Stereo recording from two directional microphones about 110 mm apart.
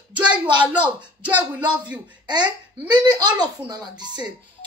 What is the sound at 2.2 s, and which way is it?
A woman's voice, 40° right (ahead or behind).